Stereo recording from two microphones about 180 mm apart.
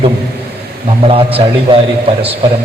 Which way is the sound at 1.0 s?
30° right (ahead or behind).